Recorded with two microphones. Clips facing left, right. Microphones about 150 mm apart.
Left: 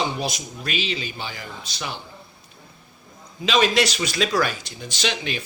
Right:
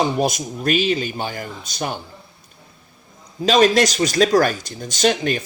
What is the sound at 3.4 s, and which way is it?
A man's voice, 45° right (ahead or behind).